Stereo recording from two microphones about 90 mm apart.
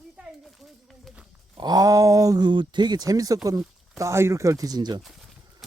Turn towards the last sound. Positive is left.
turn(degrees=-50)  # may be behind; listen again after turning